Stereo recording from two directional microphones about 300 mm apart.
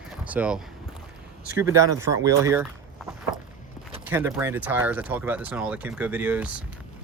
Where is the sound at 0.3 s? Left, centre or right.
Centre.